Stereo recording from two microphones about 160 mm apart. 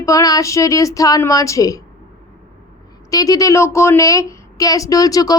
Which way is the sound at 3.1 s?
20° left (ahead or behind).